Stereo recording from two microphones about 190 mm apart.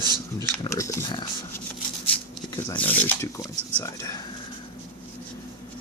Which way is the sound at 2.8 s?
10° left (ahead or behind).